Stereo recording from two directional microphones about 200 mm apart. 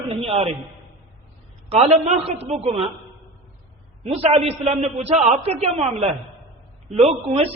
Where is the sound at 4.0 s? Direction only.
30° right (ahead or behind).